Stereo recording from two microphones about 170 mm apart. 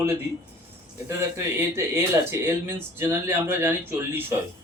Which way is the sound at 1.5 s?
15° right (ahead or behind).